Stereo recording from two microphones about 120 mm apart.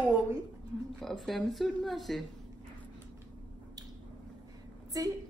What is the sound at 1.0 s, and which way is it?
A woman's voice, centre (ahead or behind).